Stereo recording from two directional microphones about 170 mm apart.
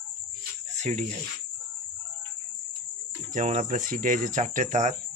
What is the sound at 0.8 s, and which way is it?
Speech, 40° right (ahead or behind).